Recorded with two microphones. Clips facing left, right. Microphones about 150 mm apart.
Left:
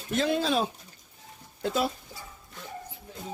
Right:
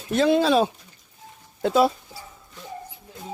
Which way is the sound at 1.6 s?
85° right.